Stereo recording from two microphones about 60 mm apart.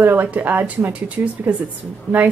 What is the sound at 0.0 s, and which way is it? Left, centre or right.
A woman's voice, right.